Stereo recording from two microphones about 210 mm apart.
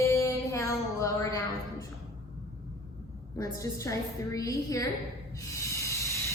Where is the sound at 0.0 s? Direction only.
15° left (ahead or behind).